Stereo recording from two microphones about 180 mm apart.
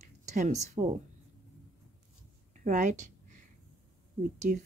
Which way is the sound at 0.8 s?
35° right (ahead or behind).